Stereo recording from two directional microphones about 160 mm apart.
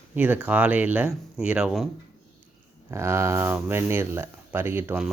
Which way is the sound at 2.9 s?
15° right (ahead or behind).